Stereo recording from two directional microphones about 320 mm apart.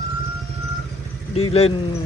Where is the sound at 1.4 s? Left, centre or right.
Centre.